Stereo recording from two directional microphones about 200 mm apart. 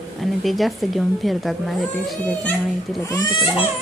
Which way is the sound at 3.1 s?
20° left (ahead or behind).